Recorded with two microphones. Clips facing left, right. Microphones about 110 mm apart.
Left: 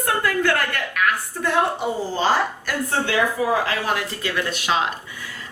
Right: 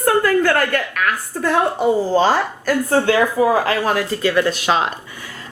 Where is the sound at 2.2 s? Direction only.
40° right (ahead or behind).